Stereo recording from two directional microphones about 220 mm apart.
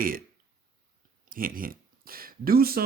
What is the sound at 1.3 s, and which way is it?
Speech, 40° right (ahead or behind).